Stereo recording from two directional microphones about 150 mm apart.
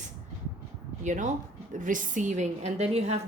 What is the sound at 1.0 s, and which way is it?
A woman's voice, 55° right (ahead or behind).